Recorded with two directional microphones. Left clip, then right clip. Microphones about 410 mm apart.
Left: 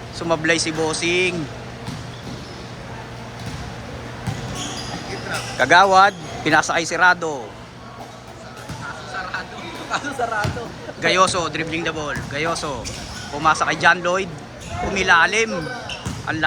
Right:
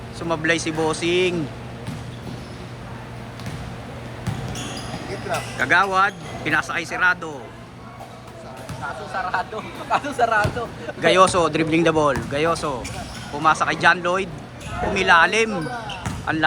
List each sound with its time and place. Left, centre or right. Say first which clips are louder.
0.2 s speech: left 2 dB; centre
5.5 s speech: left 6 dB; centre
9.3 s speech: right 7 dB; centre
9.9 s speech: right 4 dB; centre
11.0 s speech: right 2 dB; centre